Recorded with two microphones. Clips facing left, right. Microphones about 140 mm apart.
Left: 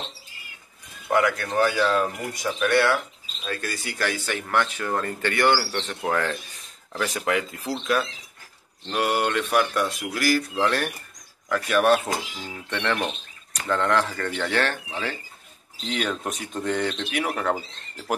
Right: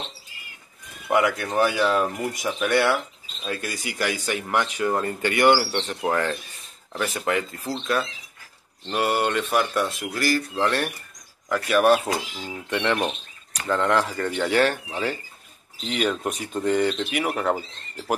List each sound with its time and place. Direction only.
1.1 s speech: 15° right (ahead or behind)